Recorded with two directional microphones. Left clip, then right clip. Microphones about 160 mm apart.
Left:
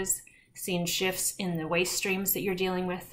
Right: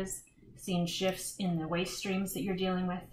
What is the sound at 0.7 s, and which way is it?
A woman's voice, 20° left (ahead or behind).